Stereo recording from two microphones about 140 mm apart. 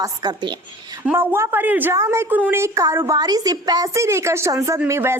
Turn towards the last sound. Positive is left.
turn(degrees=-15)  # may be behind; listen again after turning